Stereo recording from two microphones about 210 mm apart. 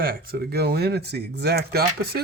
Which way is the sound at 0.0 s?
45° right (ahead or behind).